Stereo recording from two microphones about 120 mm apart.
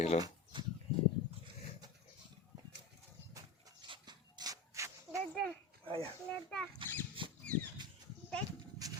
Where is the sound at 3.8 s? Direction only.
40° right (ahead or behind).